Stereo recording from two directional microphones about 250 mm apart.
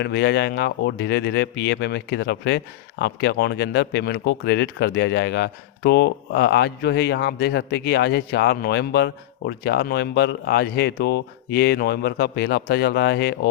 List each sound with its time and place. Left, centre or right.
0.0 s speech: left